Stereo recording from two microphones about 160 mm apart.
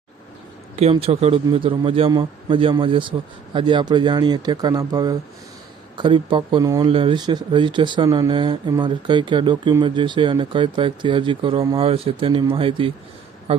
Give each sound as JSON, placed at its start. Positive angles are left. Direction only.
{"t": 0.8, "sound": "a man's voice", "side_deg": -40}